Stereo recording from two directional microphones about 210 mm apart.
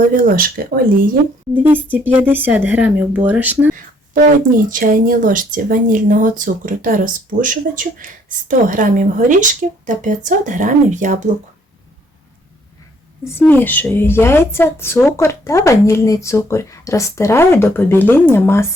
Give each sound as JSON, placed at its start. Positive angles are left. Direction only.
{"t": 0.2, "sound": "speech", "side_deg": -40}
{"t": 1.6, "sound": "speech", "side_deg": -10}
{"t": 4.1, "sound": "speech", "side_deg": -40}
{"t": 13.4, "sound": "a woman's voice", "side_deg": 10}